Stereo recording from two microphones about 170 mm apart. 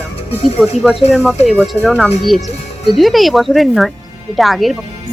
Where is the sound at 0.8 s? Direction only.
Centre (ahead or behind).